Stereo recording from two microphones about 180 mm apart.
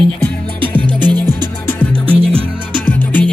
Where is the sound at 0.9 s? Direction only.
25° right (ahead or behind).